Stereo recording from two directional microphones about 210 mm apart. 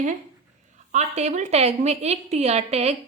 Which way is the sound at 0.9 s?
35° right (ahead or behind).